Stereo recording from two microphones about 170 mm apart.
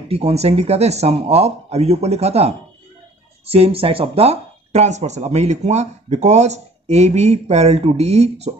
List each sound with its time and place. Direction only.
0.1 s speech: 35° right (ahead or behind)